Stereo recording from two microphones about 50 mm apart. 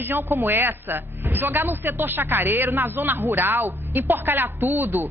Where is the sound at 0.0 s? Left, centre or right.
Right.